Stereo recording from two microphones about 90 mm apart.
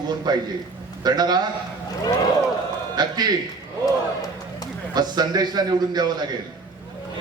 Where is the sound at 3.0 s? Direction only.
50° right (ahead or behind).